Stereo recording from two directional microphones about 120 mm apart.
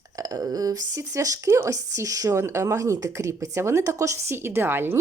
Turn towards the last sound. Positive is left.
turn(degrees=-20)  # may be behind; listen again after turning